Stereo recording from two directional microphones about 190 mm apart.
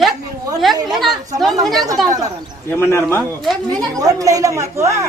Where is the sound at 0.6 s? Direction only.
Centre (ahead or behind).